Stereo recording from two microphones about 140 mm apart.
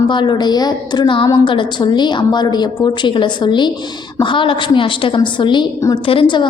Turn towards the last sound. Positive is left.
turn(degrees=35)  # may be behind; listen again after turning